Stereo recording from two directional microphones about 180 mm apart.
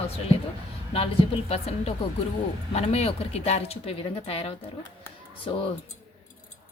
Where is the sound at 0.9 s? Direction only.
35° left (ahead or behind).